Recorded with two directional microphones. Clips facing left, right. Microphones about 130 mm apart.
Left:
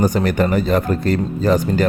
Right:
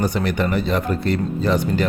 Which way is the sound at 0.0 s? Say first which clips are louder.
Left 4 dB; 45° left (ahead or behind).